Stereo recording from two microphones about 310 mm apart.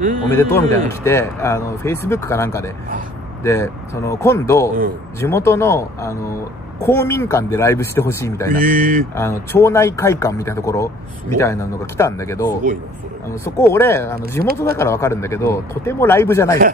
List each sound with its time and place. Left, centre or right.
0.3 s speech: centre
8.5 s speech: right
9.1 s speech: centre